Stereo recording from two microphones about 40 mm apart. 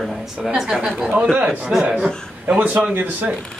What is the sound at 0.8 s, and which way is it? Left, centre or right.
Speech, right.